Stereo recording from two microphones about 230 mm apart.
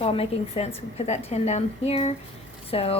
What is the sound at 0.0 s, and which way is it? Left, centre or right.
A woman's voice, left.